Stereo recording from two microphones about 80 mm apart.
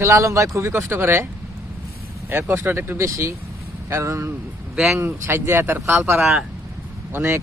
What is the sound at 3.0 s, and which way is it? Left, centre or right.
Speech, right.